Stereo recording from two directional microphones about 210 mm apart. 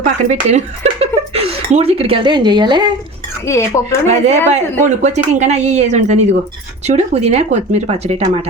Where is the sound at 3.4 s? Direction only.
15° left (ahead or behind).